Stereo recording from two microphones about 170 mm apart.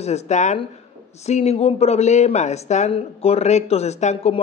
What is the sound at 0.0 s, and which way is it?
Speech, 40° left (ahead or behind).